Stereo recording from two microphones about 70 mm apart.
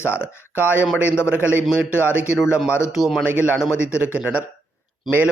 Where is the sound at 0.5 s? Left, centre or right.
Right.